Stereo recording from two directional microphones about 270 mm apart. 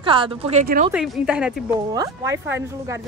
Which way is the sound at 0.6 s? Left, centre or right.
Right.